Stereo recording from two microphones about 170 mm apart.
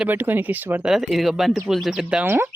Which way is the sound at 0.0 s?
10° right (ahead or behind).